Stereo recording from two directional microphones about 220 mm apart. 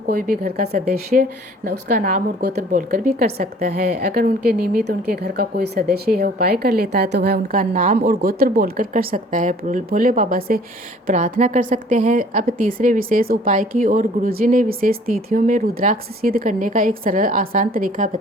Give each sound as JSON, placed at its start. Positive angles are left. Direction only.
{"t": 0.1, "sound": "a woman's voice", "side_deg": -40}
{"t": 3.6, "sound": "a woman's voice", "side_deg": -30}